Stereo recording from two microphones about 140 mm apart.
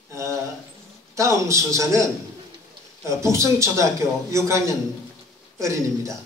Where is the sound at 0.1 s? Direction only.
20° right (ahead or behind).